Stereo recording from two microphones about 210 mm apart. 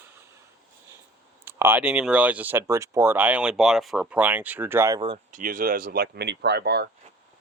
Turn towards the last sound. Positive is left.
turn(degrees=-50)  # may be behind; listen again after turning